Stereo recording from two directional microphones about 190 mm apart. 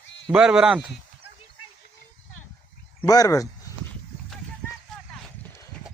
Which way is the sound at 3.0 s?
20° left (ahead or behind).